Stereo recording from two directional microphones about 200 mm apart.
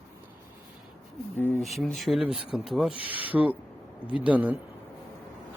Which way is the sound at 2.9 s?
25° left (ahead or behind).